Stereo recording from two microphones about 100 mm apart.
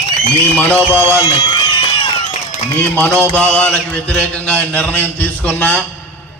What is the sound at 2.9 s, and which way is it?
A man's voice, 15° left (ahead or behind).